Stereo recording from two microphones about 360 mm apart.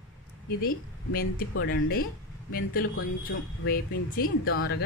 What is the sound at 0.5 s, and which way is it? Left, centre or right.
Speech, left.